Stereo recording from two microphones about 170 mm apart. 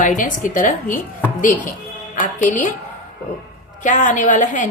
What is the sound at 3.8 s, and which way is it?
Speech, 45° left (ahead or behind).